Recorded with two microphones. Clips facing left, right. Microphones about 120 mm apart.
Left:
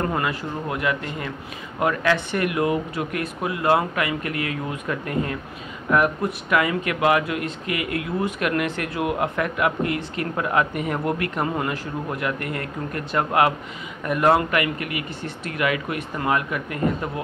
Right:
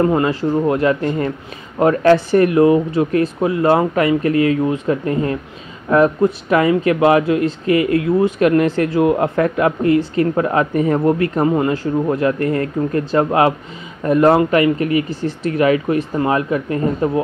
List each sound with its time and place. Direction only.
0.0 s speech: 25° right (ahead or behind)